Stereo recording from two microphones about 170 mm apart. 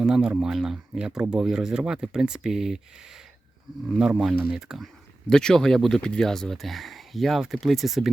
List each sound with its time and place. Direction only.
0.0 s speech: 5° right (ahead or behind)
3.9 s speech: 5° right (ahead or behind)